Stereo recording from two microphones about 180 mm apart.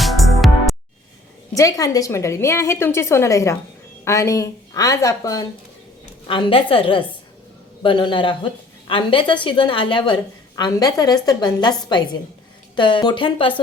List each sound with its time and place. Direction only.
0.0 s music: centre (ahead or behind)
1.5 s a woman's voice: 20° left (ahead or behind)
6.2 s a woman's voice: 30° left (ahead or behind)